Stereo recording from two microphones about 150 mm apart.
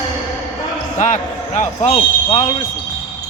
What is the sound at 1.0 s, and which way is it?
Speech, 55° left (ahead or behind).